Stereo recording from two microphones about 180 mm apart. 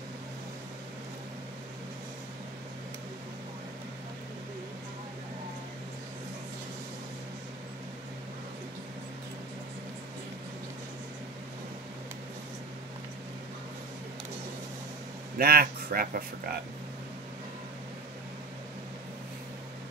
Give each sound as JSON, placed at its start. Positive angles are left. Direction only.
{"t": 15.3, "sound": "speech", "side_deg": -55}